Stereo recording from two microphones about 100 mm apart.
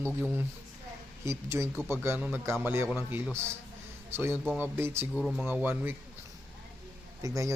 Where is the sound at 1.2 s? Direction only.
30° right (ahead or behind).